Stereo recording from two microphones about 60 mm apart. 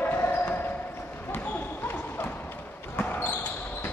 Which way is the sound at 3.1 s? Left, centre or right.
Left.